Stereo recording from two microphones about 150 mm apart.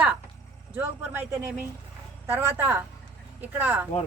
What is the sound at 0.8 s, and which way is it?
A woman's voice, 15° right (ahead or behind).